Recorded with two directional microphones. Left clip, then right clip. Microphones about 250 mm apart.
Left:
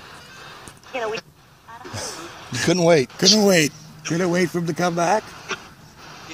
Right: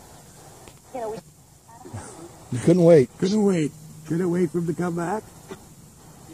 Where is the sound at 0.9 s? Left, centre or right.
Centre.